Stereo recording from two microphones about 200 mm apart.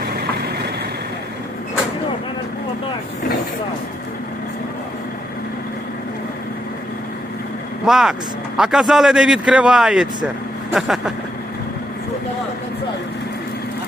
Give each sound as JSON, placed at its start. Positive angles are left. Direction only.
{"t": 7.9, "sound": "a man's voice", "side_deg": 0}
{"t": 10.7, "sound": "vehicle", "side_deg": 0}